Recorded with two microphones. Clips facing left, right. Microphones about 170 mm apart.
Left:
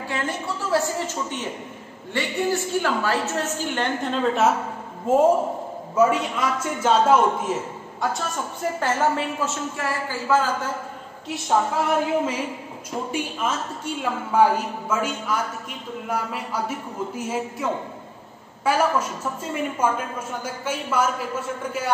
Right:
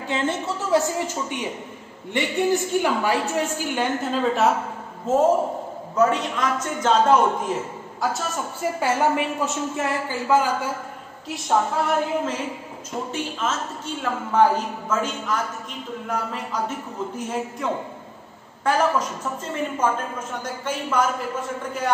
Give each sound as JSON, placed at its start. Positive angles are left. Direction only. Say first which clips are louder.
{"t": 0.1, "sound": "a woman's voice", "louder": "right 4 dB", "side_deg": -20}
{"t": 5.0, "sound": "a man's voice", "louder": "left 1 dB", "side_deg": 10}
{"t": 8.7, "sound": "a woman's voice", "louder": "right 1 dB", "side_deg": -10}
{"t": 11.2, "sound": "a woman's voice", "louder": "even", "side_deg": 0}